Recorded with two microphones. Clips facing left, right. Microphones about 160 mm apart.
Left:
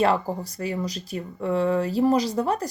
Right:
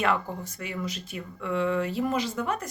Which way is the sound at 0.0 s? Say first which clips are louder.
Left 5 dB; 35° left (ahead or behind).